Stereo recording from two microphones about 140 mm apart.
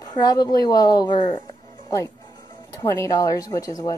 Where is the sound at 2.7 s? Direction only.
20° left (ahead or behind).